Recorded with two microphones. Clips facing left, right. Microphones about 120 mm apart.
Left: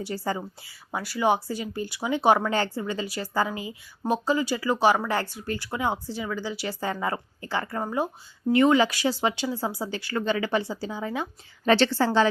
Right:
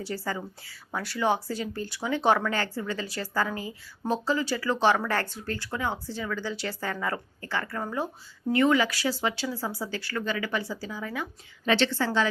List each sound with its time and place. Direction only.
0.0 s a woman's voice: 20° left (ahead or behind)
11.6 s a woman's voice: 40° left (ahead or behind)